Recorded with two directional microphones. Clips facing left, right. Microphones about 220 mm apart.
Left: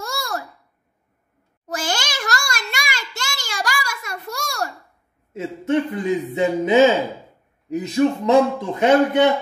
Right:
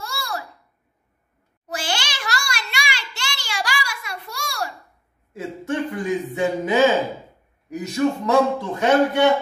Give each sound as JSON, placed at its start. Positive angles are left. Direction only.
{"t": 0.0, "sound": "babbling", "side_deg": 45}
{"t": 1.7, "sound": "a sound", "side_deg": 45}
{"t": 5.3, "sound": "a man's voice", "side_deg": 20}